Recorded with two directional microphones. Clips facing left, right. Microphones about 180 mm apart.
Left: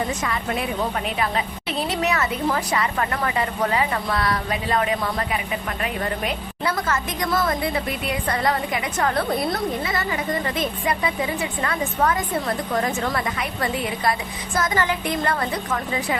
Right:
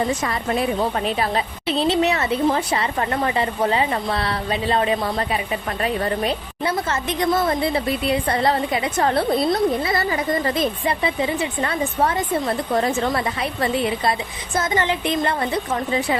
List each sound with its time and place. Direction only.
0.2 s a woman's voice: 35° right (ahead or behind)